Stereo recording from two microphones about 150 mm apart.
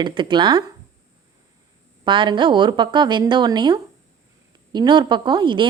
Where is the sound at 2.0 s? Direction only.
35° right (ahead or behind).